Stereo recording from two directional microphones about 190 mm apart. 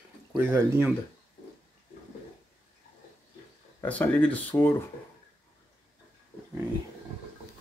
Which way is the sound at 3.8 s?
10° left (ahead or behind).